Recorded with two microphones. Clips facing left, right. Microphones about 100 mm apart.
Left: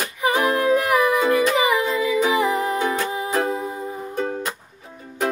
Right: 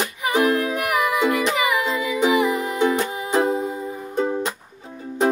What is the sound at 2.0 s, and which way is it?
Music, 20° right (ahead or behind).